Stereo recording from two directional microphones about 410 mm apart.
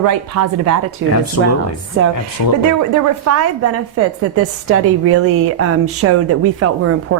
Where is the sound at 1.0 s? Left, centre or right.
Right.